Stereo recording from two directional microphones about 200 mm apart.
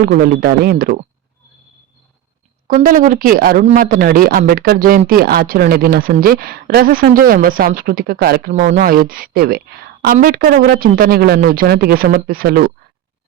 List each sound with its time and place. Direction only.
0.0 s a man's voice: 45° right (ahead or behind)
2.6 s a man's voice: 40° right (ahead or behind)